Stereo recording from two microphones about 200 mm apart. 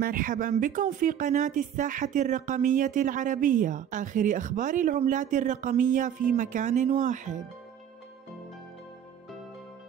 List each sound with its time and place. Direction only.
0.0 s speech: 45° right (ahead or behind)